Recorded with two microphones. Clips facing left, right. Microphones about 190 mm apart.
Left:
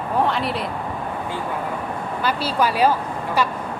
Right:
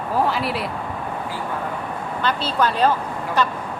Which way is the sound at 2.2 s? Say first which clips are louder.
Even; 10° left (ahead or behind).